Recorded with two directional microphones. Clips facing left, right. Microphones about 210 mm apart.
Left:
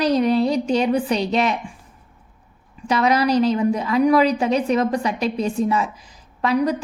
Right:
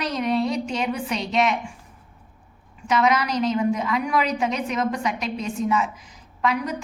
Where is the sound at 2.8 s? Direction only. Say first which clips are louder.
Left 3 dB; 35° left (ahead or behind).